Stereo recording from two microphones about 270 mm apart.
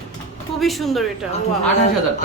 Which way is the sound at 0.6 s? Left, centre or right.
Centre.